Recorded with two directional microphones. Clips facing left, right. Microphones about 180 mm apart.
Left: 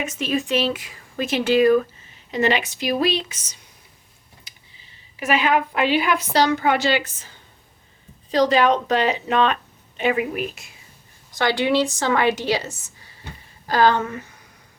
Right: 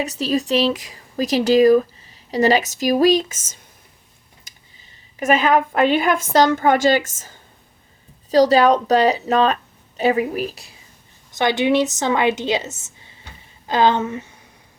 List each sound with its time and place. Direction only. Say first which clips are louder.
0.0 s speech: right 3 dB; 35° right (ahead or behind)
4.5 s a sound: even; 45° right (ahead or behind)
5.2 s a woman's voice: right 4 dB; 45° right (ahead or behind)
11.3 s a woman's voice: right 2 dB; 20° right (ahead or behind)